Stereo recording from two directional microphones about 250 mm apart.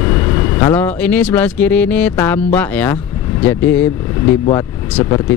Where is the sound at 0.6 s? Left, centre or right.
Centre.